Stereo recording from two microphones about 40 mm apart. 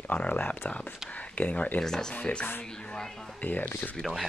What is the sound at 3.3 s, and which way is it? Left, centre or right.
Speech, left.